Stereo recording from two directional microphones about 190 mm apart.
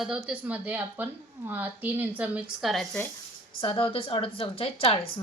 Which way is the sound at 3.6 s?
30° left (ahead or behind).